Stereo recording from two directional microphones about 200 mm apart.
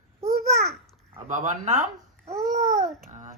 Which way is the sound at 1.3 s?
40° right (ahead or behind).